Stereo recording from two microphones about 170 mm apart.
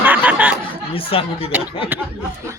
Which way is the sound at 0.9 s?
35° left (ahead or behind).